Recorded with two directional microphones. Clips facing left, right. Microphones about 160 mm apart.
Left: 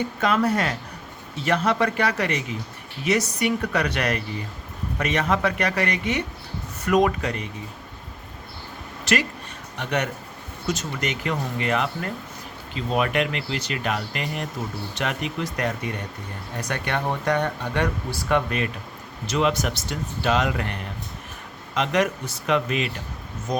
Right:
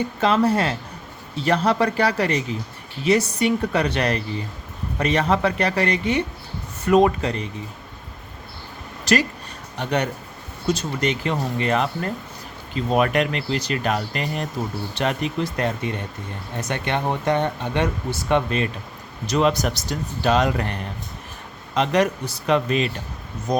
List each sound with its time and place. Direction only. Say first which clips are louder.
0.2 s speech: right 3 dB; 30° right (ahead or behind)
9.1 s speech: right 4 dB; 35° right (ahead or behind)
19.3 s speech: right 3 dB; 40° right (ahead or behind)
21.8 s speech: right 3 dB; 35° right (ahead or behind)